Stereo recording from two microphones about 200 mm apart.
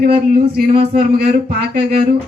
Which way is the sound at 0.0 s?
50° right (ahead or behind).